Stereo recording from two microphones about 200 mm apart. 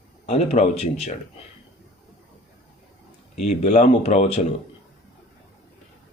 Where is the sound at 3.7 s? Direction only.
35° left (ahead or behind).